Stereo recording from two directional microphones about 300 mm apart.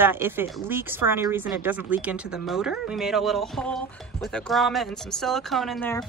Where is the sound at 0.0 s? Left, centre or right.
Centre.